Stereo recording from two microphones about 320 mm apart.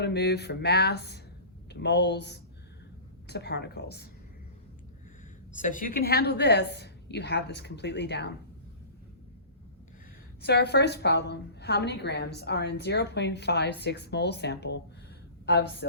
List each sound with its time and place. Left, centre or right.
0.0 s a woman's voice: left
5.5 s a woman's voice: left
10.4 s a woman's voice: left